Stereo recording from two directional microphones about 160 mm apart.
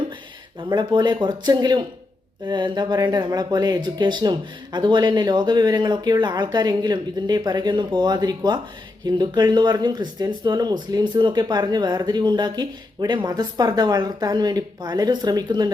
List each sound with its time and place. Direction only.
0.7 s speech: 30° right (ahead or behind)